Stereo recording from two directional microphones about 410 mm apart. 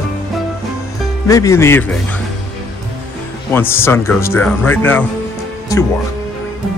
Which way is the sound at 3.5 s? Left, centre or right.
Centre.